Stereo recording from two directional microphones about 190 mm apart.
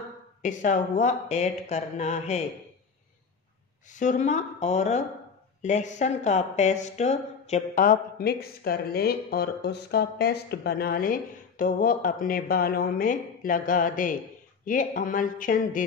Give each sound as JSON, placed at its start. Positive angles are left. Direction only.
{"t": 0.4, "sound": "speech", "side_deg": 40}
{"t": 3.9, "sound": "speech", "side_deg": 40}